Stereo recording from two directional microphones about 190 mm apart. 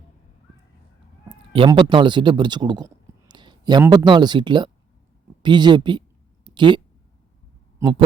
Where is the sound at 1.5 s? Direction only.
25° right (ahead or behind).